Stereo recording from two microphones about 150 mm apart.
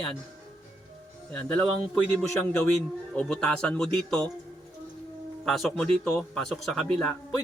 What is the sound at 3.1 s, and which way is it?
Speech, 5° left (ahead or behind).